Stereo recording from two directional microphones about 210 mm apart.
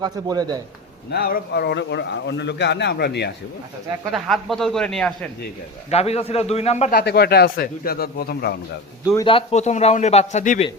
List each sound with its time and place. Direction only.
0.0 s a man's voice: 20° right (ahead or behind)
1.1 s a man's voice: 50° left (ahead or behind)
4.1 s a man's voice: centre (ahead or behind)
5.9 s a man's voice: 30° left (ahead or behind)
6.9 s a man's voice: 50° left (ahead or behind)
9.1 s a man's voice: 25° left (ahead or behind)